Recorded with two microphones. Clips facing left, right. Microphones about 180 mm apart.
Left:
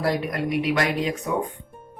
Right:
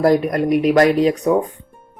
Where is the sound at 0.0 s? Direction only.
45° right (ahead or behind).